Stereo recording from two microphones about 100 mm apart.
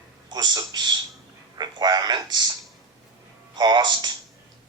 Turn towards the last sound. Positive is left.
turn(degrees=-50)  # may be behind; listen again after turning